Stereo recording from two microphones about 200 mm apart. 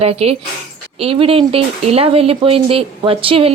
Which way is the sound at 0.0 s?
30° right (ahead or behind).